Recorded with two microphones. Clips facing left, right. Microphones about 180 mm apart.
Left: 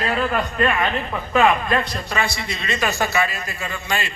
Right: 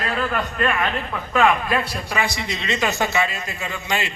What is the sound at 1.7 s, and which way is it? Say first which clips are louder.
A man's voice: left 1 dB; 5° right (ahead or behind).